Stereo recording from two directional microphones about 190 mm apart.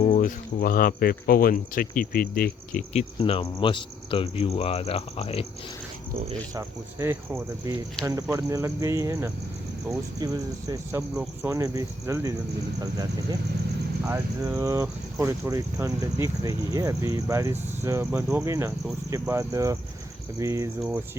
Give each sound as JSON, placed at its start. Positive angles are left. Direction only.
{"t": 0.1, "sound": "speech", "side_deg": 45}
{"t": 2.9, "sound": "speech", "side_deg": 30}
{"t": 6.5, "sound": "speech", "side_deg": -15}
{"t": 14.1, "sound": "speech", "side_deg": -15}